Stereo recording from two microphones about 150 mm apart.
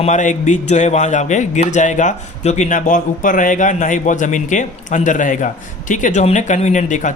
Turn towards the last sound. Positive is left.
turn(degrees=55)  # may be behind; listen again after turning